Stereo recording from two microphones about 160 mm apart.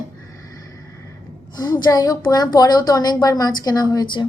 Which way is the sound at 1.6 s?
25° left (ahead or behind).